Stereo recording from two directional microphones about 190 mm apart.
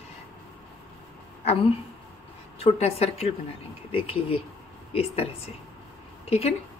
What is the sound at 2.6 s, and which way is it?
A woman's voice, 30° left (ahead or behind).